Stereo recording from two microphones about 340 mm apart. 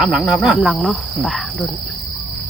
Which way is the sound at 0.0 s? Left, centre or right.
Centre.